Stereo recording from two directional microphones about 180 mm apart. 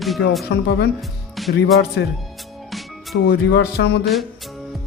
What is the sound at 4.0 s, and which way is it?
Speech, centre (ahead or behind).